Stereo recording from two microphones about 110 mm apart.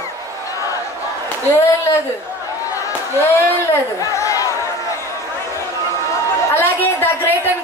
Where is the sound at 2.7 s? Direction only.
30° left (ahead or behind).